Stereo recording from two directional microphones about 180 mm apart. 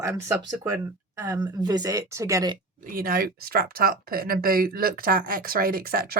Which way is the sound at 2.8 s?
50° right (ahead or behind).